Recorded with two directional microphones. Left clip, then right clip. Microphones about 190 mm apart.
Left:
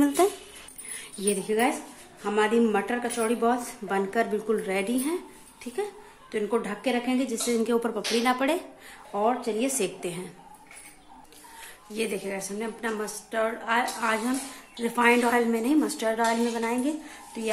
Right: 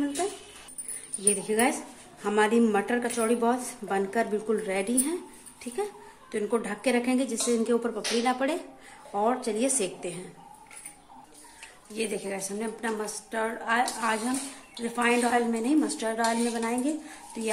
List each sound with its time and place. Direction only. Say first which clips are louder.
1.2 s a woman's voice: left 1 dB; 15° left (ahead or behind)
6.3 s a woman's voice: left 1 dB; 10° left (ahead or behind)
11.9 s a woman's voice: left 1 dB; 10° left (ahead or behind)
14.8 s a woman's voice: left 4 dB; 20° left (ahead or behind)